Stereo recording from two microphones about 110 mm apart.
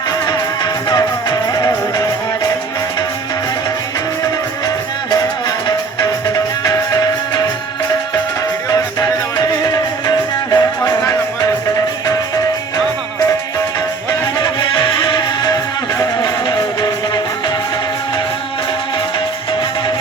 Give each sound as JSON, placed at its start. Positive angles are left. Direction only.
{"t": 0.3, "sound": "music", "side_deg": 40}
{"t": 5.6, "sound": "music", "side_deg": 35}
{"t": 9.5, "sound": "music", "side_deg": 40}
{"t": 14.1, "sound": "music", "side_deg": 40}